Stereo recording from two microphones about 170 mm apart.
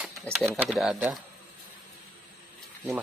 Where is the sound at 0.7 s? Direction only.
Centre (ahead or behind).